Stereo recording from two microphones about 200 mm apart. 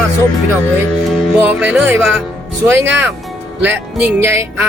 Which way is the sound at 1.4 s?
5° right (ahead or behind).